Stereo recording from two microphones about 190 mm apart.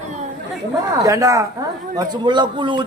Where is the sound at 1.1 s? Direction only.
15° right (ahead or behind).